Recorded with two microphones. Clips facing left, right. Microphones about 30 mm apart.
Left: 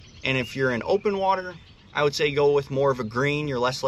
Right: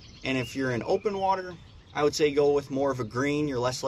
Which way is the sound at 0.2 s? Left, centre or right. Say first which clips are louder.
Left 5 dB; left.